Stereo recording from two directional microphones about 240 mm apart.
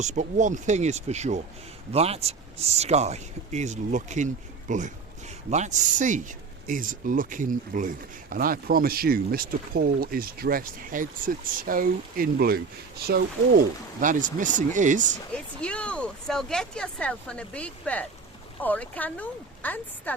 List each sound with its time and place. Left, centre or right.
0.0 s speech: right
15.6 s speech: centre